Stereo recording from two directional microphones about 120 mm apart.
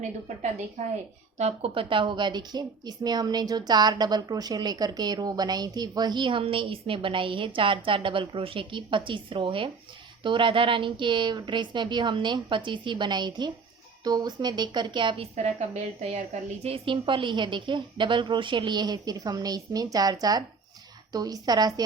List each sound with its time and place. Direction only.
1.4 s a woman's voice: 60° right (ahead or behind); by 15.3 s 40° right (ahead or behind)
15.7 s a woman's voice: 70° right (ahead or behind); by 21.8 s 35° right (ahead or behind)